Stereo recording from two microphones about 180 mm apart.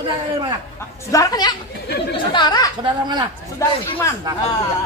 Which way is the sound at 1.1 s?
20° left (ahead or behind).